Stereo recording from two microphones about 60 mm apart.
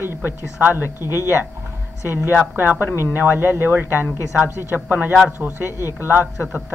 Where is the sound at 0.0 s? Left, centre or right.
Right.